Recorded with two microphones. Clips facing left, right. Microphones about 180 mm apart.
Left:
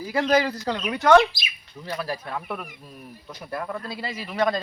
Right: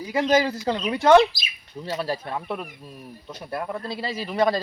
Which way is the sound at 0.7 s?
30° right (ahead or behind).